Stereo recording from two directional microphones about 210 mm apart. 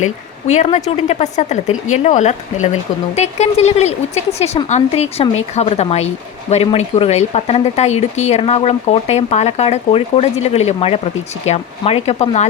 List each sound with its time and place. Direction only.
0.0 s speech: 35° left (ahead or behind)